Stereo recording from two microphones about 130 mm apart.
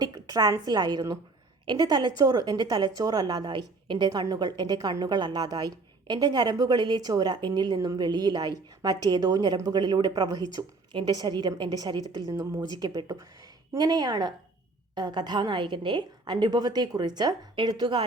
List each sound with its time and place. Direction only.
0.0 s a woman's voice: 30° right (ahead or behind)